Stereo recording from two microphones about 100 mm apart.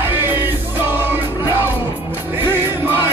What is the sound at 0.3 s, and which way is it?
Music, 20° right (ahead or behind).